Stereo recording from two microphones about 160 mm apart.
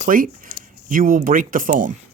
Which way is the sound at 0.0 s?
60° right (ahead or behind).